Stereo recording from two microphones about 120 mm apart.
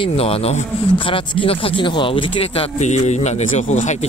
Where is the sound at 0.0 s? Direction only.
55° left (ahead or behind).